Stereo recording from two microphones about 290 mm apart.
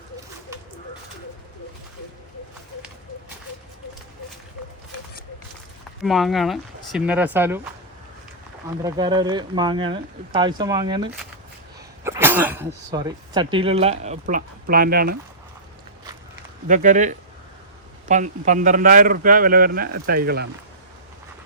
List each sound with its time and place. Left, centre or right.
6.0 s speech: centre
8.8 s speech: centre; by 15.2 s right
16.6 s speech: right